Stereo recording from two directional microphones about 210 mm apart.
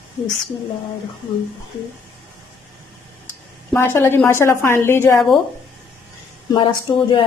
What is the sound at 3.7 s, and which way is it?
A woman's voice, 10° left (ahead or behind).